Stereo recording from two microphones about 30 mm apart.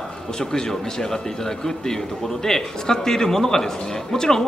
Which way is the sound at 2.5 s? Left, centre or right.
Centre.